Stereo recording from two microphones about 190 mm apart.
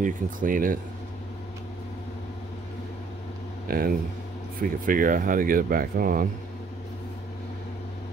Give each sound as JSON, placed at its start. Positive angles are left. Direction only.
{"t": 0.0, "sound": "speech", "side_deg": -45}
{"t": 3.6, "sound": "speech", "side_deg": -50}